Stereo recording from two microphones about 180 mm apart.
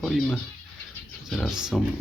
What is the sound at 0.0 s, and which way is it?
Speech, centre (ahead or behind).